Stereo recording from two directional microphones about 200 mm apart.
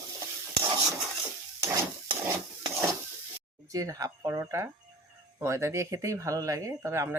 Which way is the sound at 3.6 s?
15° right (ahead or behind).